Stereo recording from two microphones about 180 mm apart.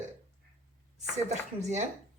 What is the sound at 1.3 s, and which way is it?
Speech, 40° right (ahead or behind).